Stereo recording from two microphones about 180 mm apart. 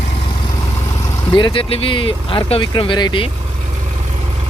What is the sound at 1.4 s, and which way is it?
Speech, 30° left (ahead or behind).